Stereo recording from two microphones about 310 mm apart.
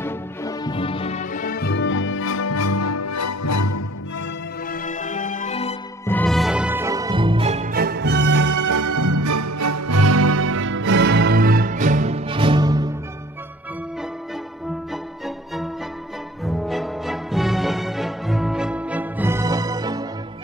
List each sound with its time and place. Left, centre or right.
0.0 s music: centre; by 3.8 s left
4.6 s music: left
6.0 s music: centre; by 8.5 s right
8.5 s music: right; by 12.9 s centre
15.2 s music: centre